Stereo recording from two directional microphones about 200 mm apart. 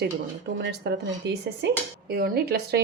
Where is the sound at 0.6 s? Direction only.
60° right (ahead or behind).